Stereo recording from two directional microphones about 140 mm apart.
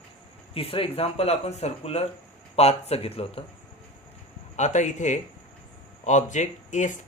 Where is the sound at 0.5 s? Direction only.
40° left (ahead or behind).